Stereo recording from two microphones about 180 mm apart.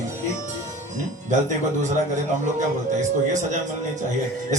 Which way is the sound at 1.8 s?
40° right (ahead or behind).